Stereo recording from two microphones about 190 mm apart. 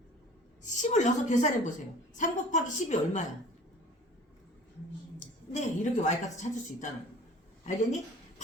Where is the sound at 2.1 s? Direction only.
40° left (ahead or behind).